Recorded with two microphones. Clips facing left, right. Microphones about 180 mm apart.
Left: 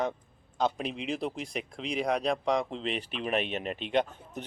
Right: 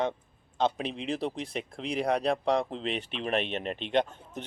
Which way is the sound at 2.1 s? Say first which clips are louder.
Right 2 dB; 35° right (ahead or behind).